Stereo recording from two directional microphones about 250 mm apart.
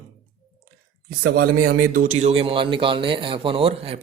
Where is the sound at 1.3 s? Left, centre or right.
Right.